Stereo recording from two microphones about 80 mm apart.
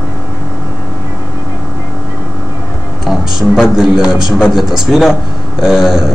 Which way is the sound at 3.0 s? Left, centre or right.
Centre.